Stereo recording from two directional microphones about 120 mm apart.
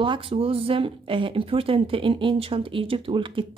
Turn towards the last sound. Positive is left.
turn(degrees=-45)  # may be behind; listen again after turning